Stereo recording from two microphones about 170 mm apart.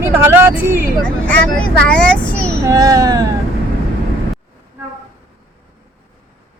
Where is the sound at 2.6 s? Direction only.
20° right (ahead or behind).